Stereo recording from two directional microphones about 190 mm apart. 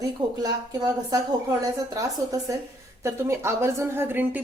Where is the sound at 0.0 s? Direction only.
20° right (ahead or behind).